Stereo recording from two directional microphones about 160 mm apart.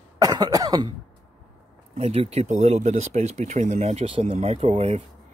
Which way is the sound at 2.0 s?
40° right (ahead or behind).